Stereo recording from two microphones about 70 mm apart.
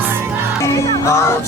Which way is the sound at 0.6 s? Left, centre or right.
Left.